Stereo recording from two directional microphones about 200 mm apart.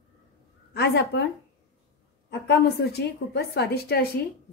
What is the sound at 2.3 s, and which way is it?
A woman's voice, 55° left (ahead or behind).